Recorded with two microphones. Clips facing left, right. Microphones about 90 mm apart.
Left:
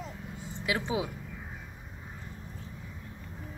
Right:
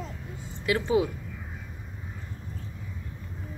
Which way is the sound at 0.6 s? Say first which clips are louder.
Right 7 dB; 15° left (ahead or behind).